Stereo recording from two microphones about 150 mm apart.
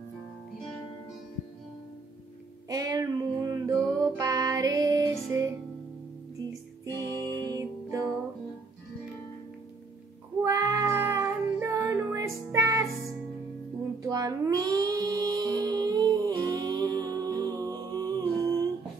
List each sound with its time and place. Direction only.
2.7 s music: 20° right (ahead or behind)
10.4 s child singing: 20° right (ahead or behind)
14.0 s music: 20° right (ahead or behind)